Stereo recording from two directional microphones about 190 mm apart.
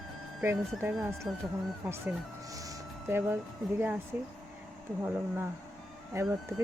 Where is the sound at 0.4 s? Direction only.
10° right (ahead or behind).